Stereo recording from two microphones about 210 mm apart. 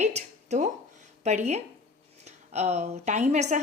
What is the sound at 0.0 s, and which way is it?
Speech, 30° right (ahead or behind).